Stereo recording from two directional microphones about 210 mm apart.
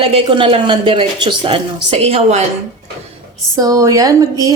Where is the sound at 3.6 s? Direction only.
15° right (ahead or behind).